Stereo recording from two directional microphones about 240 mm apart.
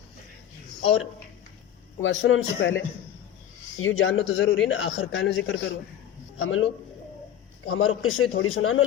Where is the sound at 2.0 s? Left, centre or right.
Left.